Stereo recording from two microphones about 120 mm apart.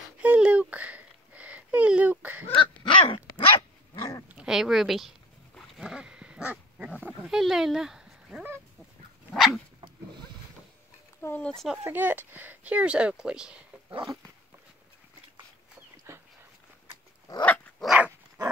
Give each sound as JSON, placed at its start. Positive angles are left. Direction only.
{"t": 0.2, "sound": "a sound", "side_deg": -10}
{"t": 2.9, "sound": "dog", "side_deg": 45}
{"t": 4.3, "sound": "a sound", "side_deg": -5}
{"t": 9.3, "sound": "dog", "side_deg": 0}
{"t": 11.1, "sound": "speech", "side_deg": 15}
{"t": 11.5, "sound": "speech", "side_deg": 0}
{"t": 11.8, "sound": "speech", "side_deg": -15}
{"t": 16.1, "sound": "dog", "side_deg": -20}
{"t": 17.4, "sound": "dog", "side_deg": 10}
{"t": 17.8, "sound": "dog", "side_deg": -10}